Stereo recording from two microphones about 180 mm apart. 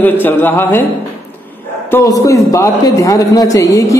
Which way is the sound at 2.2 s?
20° left (ahead or behind).